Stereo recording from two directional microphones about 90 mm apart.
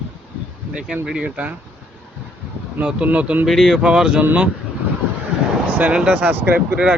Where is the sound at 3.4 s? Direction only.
Centre (ahead or behind).